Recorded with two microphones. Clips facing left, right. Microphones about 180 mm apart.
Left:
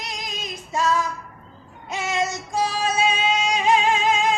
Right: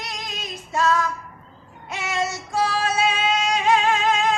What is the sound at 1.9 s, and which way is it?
Music, 20° left (ahead or behind).